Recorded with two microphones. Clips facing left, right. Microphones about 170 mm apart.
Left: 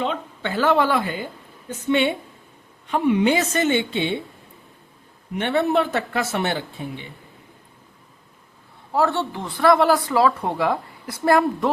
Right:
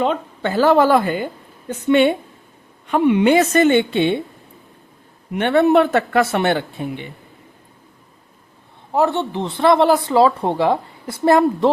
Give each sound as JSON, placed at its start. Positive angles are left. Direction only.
{"t": 0.0, "sound": "speech", "side_deg": -45}
{"t": 2.9, "sound": "speech", "side_deg": -65}
{"t": 5.4, "sound": "speech", "side_deg": -60}
{"t": 8.9, "sound": "speech", "side_deg": -20}